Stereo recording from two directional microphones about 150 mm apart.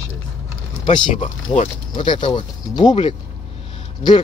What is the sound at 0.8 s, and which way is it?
Speech, 30° left (ahead or behind).